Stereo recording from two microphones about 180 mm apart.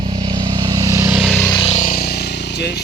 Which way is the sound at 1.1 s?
Centre (ahead or behind).